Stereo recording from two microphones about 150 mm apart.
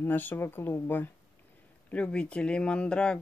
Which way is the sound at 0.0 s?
15° left (ahead or behind).